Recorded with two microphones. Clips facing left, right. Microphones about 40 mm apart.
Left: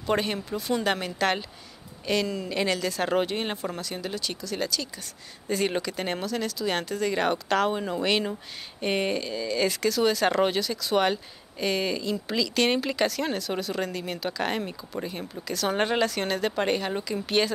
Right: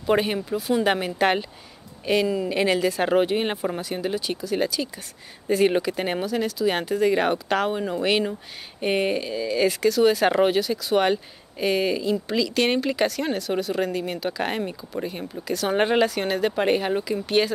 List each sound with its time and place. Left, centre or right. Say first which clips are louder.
0.0 s speech: right 5 dB; centre